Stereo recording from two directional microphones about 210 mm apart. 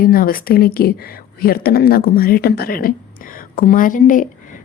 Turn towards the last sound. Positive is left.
turn(degrees=40)  # may be behind; listen again after turning